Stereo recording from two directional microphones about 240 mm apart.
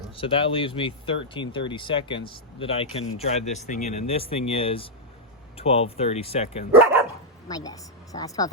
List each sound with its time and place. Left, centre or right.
0.2 s speech: left
7.4 s speech: centre